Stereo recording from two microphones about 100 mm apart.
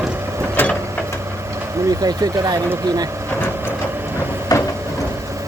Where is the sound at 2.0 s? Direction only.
40° right (ahead or behind).